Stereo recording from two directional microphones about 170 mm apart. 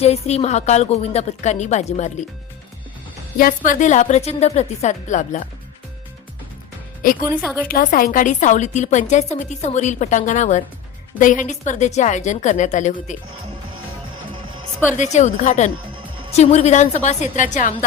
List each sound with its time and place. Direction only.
0.0 s a woman's voice: 40° left (ahead or behind)
3.3 s a woman's voice: 50° left (ahead or behind)
7.0 s a woman's voice: 55° left (ahead or behind)
14.9 s a woman's voice: 45° left (ahead or behind)